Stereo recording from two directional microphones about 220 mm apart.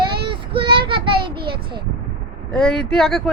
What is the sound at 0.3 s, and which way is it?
Child singing, 20° right (ahead or behind).